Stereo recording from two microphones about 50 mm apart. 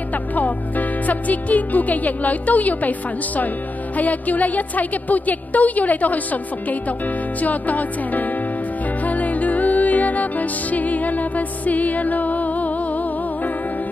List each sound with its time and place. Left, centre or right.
0.4 s music: left
4.0 s music: left
7.4 s music: left